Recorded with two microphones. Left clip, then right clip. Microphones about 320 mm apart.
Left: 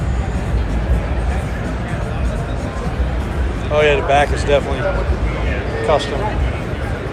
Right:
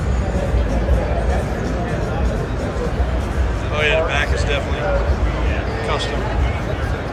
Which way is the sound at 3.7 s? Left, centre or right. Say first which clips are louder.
Left 5 dB; centre.